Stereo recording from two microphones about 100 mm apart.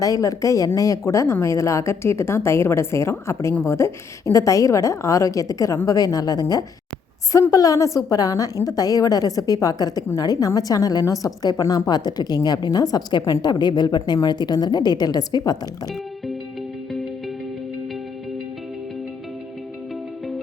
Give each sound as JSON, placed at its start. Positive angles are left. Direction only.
{"t": 0.0, "sound": "a woman's voice", "side_deg": 35}